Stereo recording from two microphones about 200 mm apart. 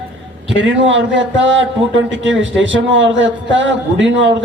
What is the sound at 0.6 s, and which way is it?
A man's voice, 65° right (ahead or behind).